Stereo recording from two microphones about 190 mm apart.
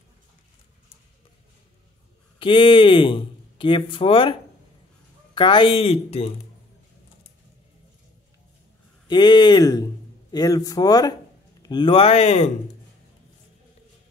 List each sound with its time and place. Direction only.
2.3 s speech: 25° left (ahead or behind)
9.0 s speech: 25° left (ahead or behind)